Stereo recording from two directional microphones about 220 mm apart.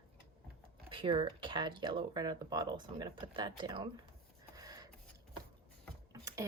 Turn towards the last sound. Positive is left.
turn(degrees=-15)  # may be behind; listen again after turning